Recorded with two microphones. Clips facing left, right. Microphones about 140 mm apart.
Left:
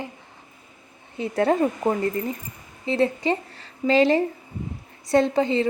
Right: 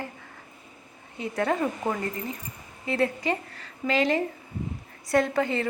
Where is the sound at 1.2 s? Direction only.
30° left (ahead or behind).